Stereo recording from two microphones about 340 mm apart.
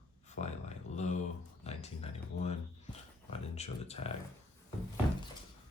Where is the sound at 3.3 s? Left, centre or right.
Centre.